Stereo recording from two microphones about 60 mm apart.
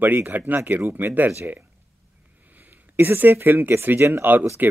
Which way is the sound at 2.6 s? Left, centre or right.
Right.